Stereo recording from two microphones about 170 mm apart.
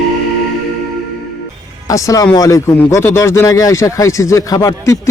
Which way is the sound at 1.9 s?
20° left (ahead or behind).